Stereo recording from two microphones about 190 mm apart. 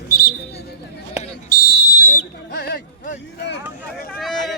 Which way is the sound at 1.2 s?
50° left (ahead or behind).